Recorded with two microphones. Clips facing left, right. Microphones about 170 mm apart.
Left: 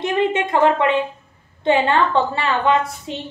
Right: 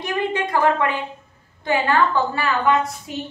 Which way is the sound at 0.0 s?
25° left (ahead or behind).